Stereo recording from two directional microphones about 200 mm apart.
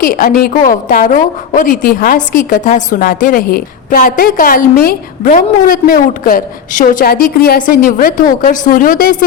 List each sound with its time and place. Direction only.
0.0 s a woman's voice: 45° left (ahead or behind)